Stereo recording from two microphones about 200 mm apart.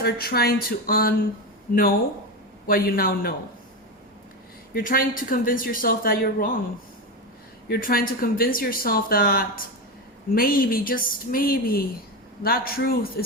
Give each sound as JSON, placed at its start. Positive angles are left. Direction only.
{"t": 0.0, "sound": "speech", "side_deg": 50}
{"t": 2.6, "sound": "speech", "side_deg": 45}
{"t": 4.7, "sound": "speech", "side_deg": 45}
{"t": 7.7, "sound": "speech", "side_deg": 45}